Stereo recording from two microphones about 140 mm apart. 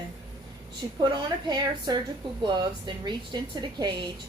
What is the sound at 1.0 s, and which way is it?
A woman's voice, 30° right (ahead or behind).